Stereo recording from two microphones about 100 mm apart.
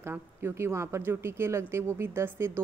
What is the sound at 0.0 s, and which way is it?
Speech, 20° right (ahead or behind).